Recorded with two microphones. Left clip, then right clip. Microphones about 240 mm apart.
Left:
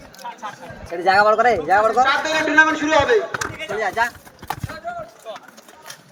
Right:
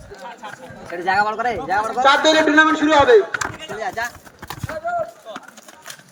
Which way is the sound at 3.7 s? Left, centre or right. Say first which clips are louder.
Left 6 dB; centre.